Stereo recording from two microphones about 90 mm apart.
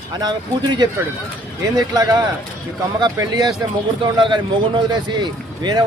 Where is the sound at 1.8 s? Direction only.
40° right (ahead or behind).